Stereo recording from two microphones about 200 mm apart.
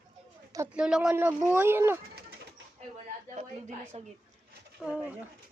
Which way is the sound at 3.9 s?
30° right (ahead or behind).